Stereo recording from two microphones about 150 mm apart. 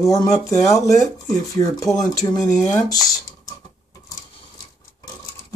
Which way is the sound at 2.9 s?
25° left (ahead or behind).